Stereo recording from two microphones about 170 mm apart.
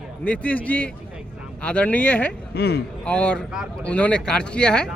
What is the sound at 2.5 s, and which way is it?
Speech, 75° left (ahead or behind).